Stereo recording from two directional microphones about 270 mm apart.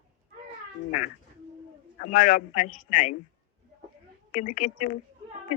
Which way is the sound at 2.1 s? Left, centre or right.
Left.